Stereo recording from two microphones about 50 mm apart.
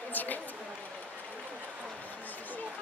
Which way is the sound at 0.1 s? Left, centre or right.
Left.